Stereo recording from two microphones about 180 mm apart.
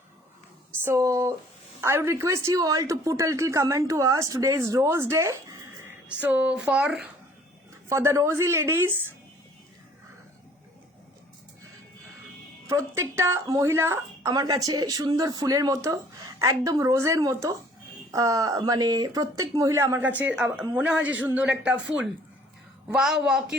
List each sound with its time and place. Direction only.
0.9 s speech: 15° right (ahead or behind)
7.9 s speech: 15° right (ahead or behind)
12.6 s a woman's voice: 15° right (ahead or behind)